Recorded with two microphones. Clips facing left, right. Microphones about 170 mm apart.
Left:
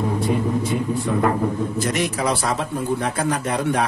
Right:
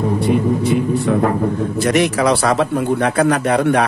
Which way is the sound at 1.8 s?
75° right (ahead or behind).